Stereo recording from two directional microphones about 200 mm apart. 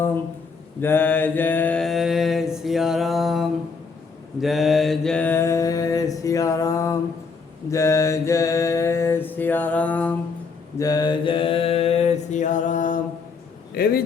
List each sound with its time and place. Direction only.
0.8 s mantra: 10° left (ahead or behind)
10.8 s mantra: 20° left (ahead or behind); by 13.0 s 40° left (ahead or behind)
13.8 s a man's voice: 50° left (ahead or behind)